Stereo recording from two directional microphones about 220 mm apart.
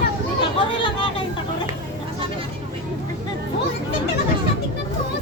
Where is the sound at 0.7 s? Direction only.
25° left (ahead or behind).